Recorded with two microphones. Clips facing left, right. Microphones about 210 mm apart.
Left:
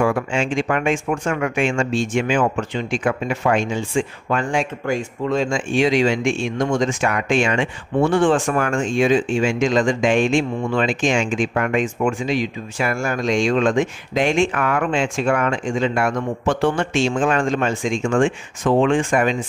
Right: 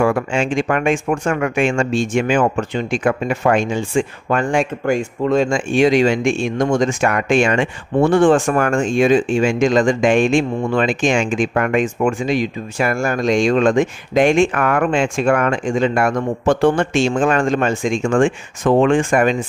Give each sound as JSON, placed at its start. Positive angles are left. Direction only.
{"t": 0.0, "sound": "speech", "side_deg": -50}